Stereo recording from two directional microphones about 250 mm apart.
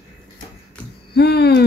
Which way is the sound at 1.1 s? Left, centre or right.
Left.